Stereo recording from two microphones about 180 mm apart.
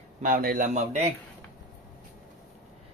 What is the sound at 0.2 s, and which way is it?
Speech, 50° right (ahead or behind).